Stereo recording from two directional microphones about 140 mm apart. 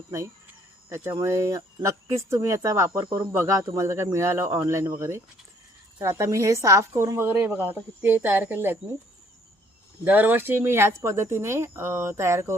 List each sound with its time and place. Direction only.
0.9 s a woman's voice: 20° right (ahead or behind)
10.0 s speech: 10° right (ahead or behind)